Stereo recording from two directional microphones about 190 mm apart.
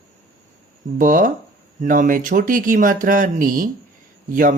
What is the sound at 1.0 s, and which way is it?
Speech, 45° right (ahead or behind).